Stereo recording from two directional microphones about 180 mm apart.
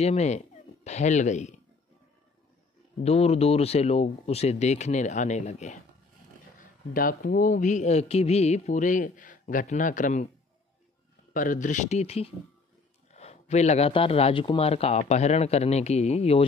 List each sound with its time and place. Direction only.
0.0 s speech: 40° left (ahead or behind)
3.0 s speech: 35° left (ahead or behind)
6.9 s speech: 50° left (ahead or behind)
11.3 s speech: 45° left (ahead or behind)